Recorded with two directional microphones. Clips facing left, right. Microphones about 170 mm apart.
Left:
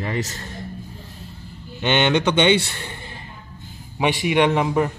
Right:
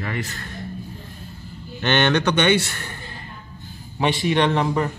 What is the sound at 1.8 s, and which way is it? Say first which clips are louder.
A man's voice: left 1 dB; 10° left (ahead or behind).